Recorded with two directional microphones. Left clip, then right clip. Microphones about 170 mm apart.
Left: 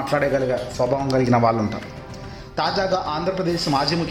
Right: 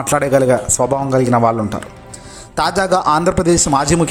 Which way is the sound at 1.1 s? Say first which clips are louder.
Right 4 dB; 25° right (ahead or behind).